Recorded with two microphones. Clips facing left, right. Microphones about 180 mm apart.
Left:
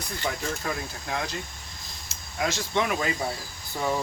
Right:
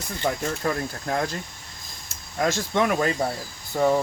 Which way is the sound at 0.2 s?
50° right (ahead or behind).